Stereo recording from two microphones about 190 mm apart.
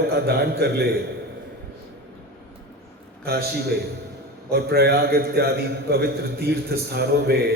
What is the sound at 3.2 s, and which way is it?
A man's voice, 55° right (ahead or behind).